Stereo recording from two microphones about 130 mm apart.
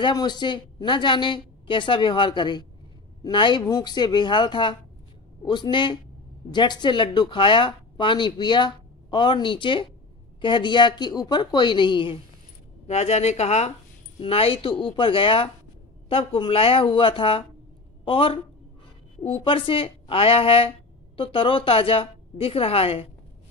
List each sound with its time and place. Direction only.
0.0 s speech: 35° left (ahead or behind)
12.8 s a woman's voice: 55° left (ahead or behind)